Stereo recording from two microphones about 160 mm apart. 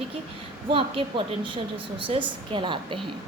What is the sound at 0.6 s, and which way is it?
A woman's voice, 35° right (ahead or behind).